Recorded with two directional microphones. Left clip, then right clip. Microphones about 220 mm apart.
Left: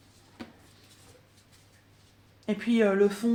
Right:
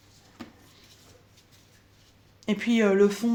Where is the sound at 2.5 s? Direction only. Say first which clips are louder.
Right 2 dB; 45° right (ahead or behind).